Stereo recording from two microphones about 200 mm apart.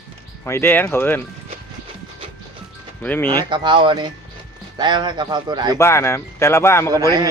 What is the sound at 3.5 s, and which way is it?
A man's voice, 25° right (ahead or behind).